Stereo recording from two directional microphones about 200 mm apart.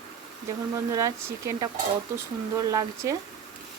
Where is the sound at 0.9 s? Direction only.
15° right (ahead or behind).